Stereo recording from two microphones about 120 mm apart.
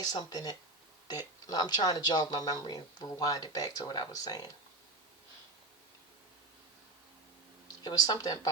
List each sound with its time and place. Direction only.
0.0 s speech: 35° left (ahead or behind)
7.9 s speech: 35° left (ahead or behind)